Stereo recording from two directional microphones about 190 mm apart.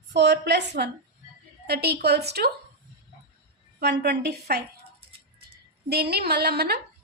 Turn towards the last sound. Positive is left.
turn(degrees=-55)  # may be behind; listen again after turning